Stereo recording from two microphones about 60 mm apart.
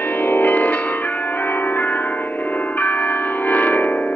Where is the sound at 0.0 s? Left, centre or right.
Left.